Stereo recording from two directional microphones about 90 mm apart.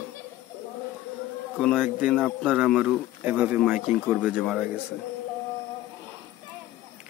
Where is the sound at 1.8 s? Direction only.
15° right (ahead or behind).